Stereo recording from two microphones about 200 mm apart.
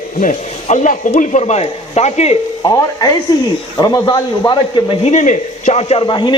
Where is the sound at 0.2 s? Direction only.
40° left (ahead or behind).